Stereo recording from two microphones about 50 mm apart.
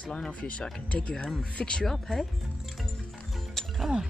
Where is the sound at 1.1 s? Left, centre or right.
Centre.